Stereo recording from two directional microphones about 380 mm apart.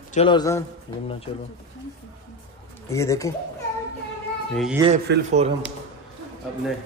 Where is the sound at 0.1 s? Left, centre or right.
Centre.